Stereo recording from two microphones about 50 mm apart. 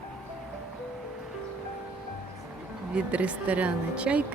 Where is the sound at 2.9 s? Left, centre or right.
Right.